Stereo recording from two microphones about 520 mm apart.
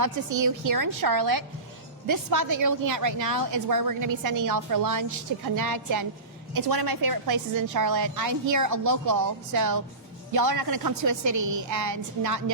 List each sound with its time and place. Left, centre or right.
0.0 s a woman's voice: right